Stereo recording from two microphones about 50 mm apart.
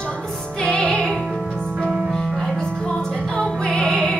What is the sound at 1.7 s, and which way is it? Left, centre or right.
Music, right.